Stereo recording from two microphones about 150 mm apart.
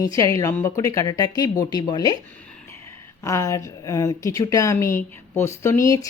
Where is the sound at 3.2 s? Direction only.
20° left (ahead or behind).